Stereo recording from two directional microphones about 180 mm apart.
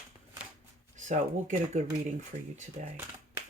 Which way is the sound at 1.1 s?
40° right (ahead or behind).